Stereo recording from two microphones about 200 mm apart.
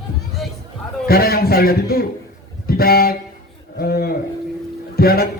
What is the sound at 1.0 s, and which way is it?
A man's voice, 50° left (ahead or behind).